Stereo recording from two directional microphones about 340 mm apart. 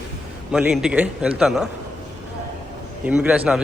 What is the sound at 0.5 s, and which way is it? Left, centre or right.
A man's voice, centre.